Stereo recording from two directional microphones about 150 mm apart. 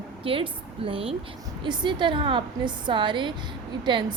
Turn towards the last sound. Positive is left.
turn(degrees=-30)  # may be behind; listen again after turning